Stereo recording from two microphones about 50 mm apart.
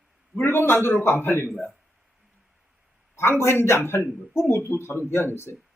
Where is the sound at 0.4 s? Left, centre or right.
Left.